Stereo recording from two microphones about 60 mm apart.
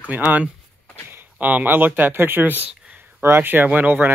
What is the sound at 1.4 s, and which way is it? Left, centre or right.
Speech, right.